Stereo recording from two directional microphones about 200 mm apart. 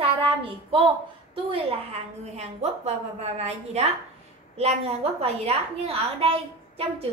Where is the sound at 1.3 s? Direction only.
30° right (ahead or behind).